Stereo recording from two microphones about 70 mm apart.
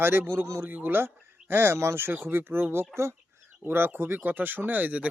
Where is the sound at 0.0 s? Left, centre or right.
Right.